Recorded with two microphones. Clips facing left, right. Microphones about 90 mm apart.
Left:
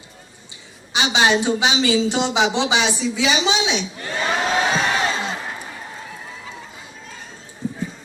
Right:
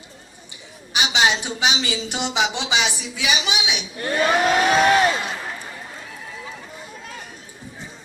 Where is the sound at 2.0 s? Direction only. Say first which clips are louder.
Left 4 dB; 20° left (ahead or behind).